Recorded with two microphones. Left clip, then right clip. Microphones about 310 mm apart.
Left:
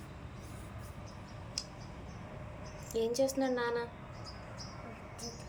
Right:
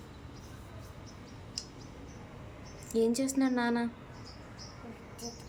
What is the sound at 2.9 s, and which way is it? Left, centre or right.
Speech, centre.